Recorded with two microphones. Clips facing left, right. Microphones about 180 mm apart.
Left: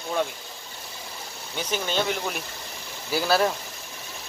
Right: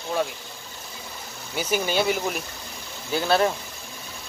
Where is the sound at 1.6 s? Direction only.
10° right (ahead or behind).